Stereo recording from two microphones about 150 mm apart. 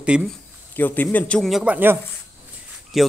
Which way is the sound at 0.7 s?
10° left (ahead or behind).